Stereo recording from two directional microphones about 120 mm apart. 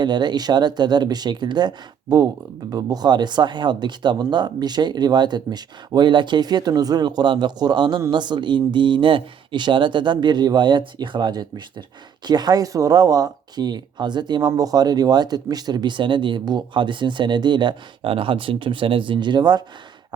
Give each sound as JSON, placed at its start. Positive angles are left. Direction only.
{"t": 0.0, "sound": "speech", "side_deg": -35}